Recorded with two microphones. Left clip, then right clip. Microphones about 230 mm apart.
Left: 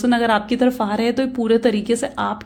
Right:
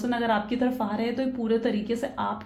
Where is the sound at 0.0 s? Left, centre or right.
Left.